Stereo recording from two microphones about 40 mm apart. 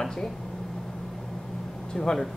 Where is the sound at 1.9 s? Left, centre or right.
Centre.